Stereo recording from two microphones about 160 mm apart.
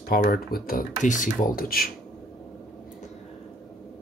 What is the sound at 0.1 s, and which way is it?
Speech, 70° left (ahead or behind).